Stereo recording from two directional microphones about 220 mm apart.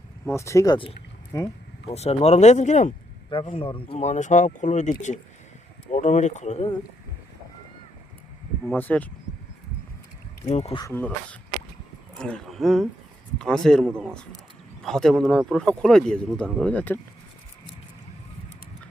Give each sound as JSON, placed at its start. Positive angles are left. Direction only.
{"t": 0.3, "sound": "speech", "side_deg": 15}
{"t": 1.9, "sound": "speech", "side_deg": 30}
{"t": 8.6, "sound": "speech", "side_deg": 10}
{"t": 10.4, "sound": "speech", "side_deg": 30}
{"t": 10.8, "sound": "speech", "side_deg": 10}